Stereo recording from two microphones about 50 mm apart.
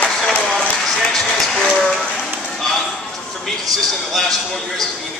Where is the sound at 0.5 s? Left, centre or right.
Centre.